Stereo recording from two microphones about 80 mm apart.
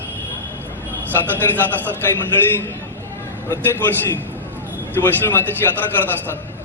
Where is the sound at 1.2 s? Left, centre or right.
Left.